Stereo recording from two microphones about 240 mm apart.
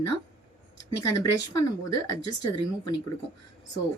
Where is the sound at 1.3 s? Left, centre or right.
Left.